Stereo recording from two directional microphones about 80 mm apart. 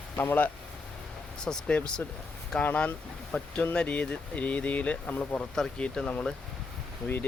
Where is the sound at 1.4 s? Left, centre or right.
Centre.